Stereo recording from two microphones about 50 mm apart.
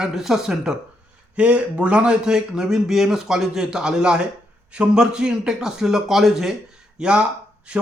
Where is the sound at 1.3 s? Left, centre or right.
Right; by 6.5 s centre.